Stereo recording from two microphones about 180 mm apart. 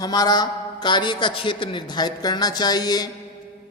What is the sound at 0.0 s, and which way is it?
A man's voice, 20° left (ahead or behind).